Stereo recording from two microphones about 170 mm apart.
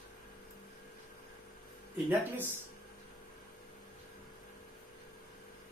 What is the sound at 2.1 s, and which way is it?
Speech, 10° right (ahead or behind).